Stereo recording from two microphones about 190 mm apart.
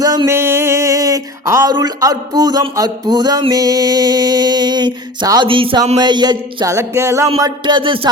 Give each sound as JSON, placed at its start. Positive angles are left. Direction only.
{"t": 0.0, "sound": "music", "side_deg": -20}
{"t": 6.0, "sound": "a sound", "side_deg": -20}
{"t": 7.3, "sound": "music", "side_deg": -20}